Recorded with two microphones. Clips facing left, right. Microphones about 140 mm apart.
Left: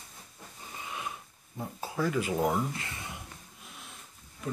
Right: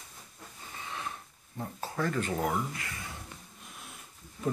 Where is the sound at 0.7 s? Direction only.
15° left (ahead or behind).